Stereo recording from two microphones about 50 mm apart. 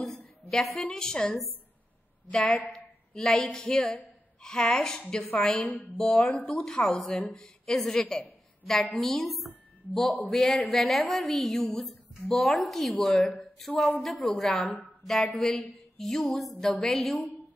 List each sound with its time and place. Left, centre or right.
0.5 s a woman's voice: centre
3.2 s a woman's voice: centre
13.4 s a sound: centre
14.0 s a woman's voice: centre